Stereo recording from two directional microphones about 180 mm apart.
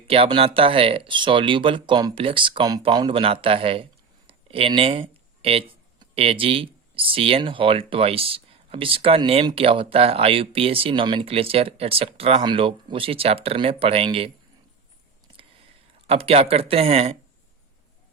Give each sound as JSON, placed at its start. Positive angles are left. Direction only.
{"t": 0.1, "sound": "speech", "side_deg": -30}
{"t": 16.0, "sound": "speech", "side_deg": -35}